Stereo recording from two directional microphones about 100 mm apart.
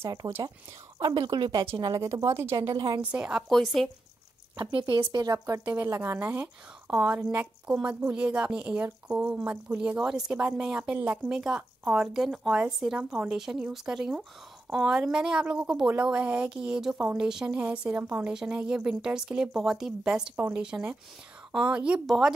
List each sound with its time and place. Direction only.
0.2 s a woman's voice: 25° right (ahead or behind)
0.9 s speech: 45° right (ahead or behind)
2.0 s speech: 30° right (ahead or behind)
2.5 s speech: 45° right (ahead or behind)
3.0 s a woman's voice: 10° right (ahead or behind)
3.4 s a woman's voice: centre (ahead or behind)
4.6 s speech: 50° right (ahead or behind)
5.7 s a woman's voice: 25° right (ahead or behind); by 16.9 s 5° right (ahead or behind)
16.9 s a woman's voice: 15° right (ahead or behind)
17.2 s a woman's voice: 5° right (ahead or behind)